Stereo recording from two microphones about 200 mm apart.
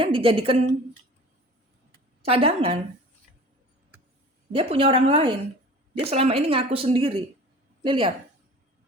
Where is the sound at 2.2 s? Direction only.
30° right (ahead or behind).